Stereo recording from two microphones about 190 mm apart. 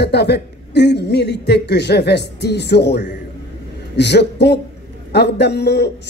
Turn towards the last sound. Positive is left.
turn(degrees=60)  # may be behind; listen again after turning